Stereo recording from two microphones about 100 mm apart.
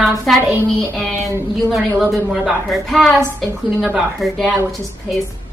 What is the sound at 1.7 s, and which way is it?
A woman's voice, centre (ahead or behind).